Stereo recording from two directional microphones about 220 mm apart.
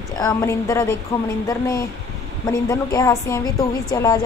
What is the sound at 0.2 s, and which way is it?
A woman's voice, 15° left (ahead or behind).